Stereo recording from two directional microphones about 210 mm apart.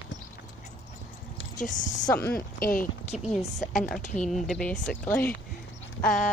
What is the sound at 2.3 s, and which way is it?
Speech, 45° left (ahead or behind).